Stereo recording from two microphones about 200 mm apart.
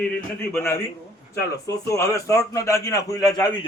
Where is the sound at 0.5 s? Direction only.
10° left (ahead or behind).